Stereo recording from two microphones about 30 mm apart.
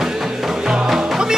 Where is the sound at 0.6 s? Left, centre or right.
Right.